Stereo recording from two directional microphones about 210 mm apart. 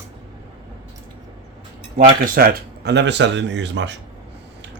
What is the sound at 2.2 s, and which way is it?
Speech, 45° right (ahead or behind).